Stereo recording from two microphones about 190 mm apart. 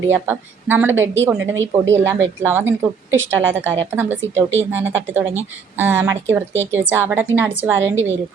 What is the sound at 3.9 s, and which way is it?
Speech, 10° right (ahead or behind).